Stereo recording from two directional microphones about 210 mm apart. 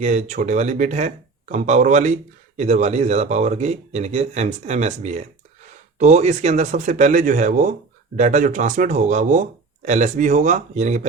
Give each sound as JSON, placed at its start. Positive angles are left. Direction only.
{"t": 0.0, "sound": "speech", "side_deg": -35}